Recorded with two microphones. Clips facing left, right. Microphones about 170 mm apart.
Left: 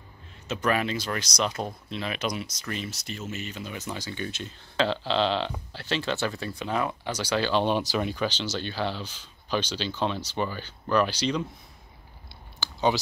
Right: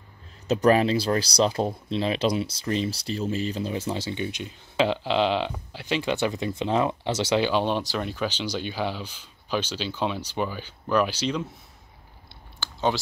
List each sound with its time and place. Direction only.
0.5 s speech: 35° right (ahead or behind)
7.5 s speech: centre (ahead or behind)
8.3 s speech: 10° right (ahead or behind)
12.5 s a sound: centre (ahead or behind)